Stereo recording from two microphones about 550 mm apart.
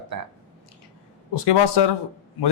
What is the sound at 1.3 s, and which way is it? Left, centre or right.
Speech, left.